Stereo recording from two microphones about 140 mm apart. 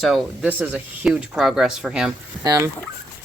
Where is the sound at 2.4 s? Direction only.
25° right (ahead or behind).